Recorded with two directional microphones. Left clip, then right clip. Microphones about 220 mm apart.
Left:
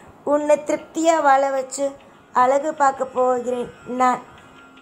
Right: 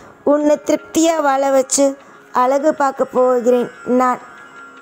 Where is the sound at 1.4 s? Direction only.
45° right (ahead or behind).